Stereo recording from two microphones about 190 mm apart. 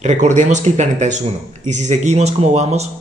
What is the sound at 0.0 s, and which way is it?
Speech, 40° right (ahead or behind).